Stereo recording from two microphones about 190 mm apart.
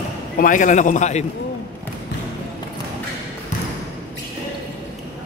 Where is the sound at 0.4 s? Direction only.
45° left (ahead or behind).